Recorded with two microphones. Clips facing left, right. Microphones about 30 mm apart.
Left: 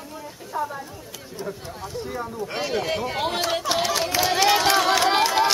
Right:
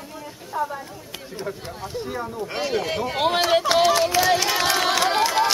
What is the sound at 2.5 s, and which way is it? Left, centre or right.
Speech, centre.